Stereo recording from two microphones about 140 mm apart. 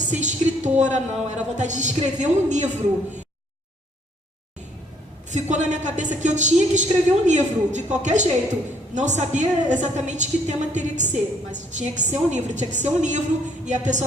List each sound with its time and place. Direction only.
0.0 s a woman's voice: 60° right (ahead or behind)
5.3 s a woman's voice: 60° right (ahead or behind)